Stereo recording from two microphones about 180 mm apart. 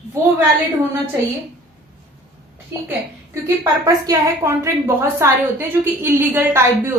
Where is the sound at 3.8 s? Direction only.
15° right (ahead or behind).